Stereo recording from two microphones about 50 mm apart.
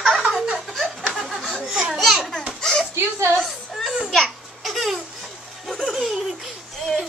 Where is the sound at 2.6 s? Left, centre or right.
Centre.